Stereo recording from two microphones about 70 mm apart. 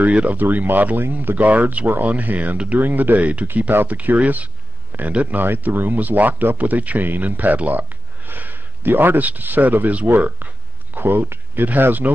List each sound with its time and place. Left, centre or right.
0.0 s speech: right